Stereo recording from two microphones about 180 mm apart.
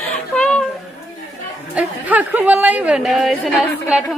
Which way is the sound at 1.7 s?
10° right (ahead or behind).